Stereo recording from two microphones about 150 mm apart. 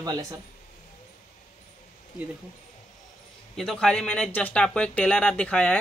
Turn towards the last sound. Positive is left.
turn(degrees=5)  # may be behind; listen again after turning